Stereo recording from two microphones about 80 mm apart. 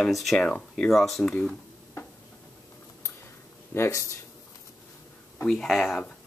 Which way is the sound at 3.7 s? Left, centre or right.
Left.